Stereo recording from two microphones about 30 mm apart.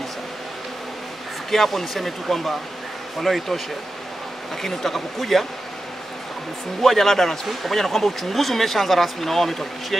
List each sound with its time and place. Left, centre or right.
1.5 s speech: centre
4.6 s speech: centre
6.8 s speech: centre